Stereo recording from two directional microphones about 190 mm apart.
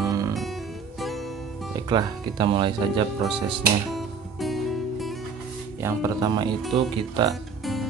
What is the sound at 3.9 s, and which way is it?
Music, centre (ahead or behind).